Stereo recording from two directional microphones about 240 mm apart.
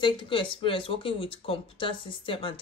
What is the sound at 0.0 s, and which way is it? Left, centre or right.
Speech, left.